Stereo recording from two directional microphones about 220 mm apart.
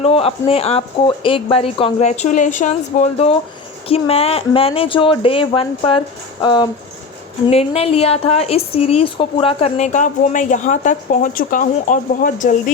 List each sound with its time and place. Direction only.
0.0 s speech: 25° left (ahead or behind)